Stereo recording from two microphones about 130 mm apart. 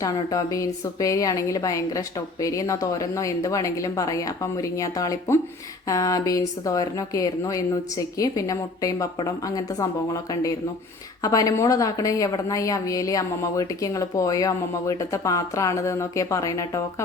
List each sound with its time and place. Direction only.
0.0 s speech: 25° left (ahead or behind)